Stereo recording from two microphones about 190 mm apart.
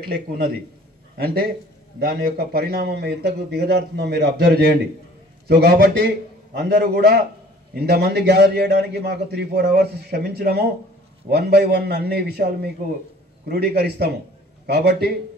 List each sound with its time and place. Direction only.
1.1 s a man's voice: 55° right (ahead or behind)